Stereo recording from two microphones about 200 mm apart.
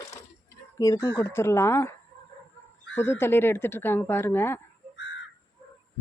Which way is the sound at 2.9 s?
10° left (ahead or behind).